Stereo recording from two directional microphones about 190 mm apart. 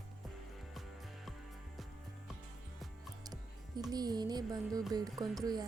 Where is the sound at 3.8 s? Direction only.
20° right (ahead or behind).